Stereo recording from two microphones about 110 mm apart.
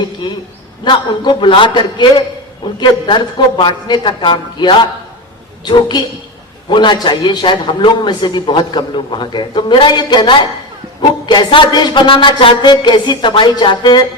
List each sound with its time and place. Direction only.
0.9 s a man's voice: 45° left (ahead or behind)
6.7 s a man's voice: 45° left (ahead or behind)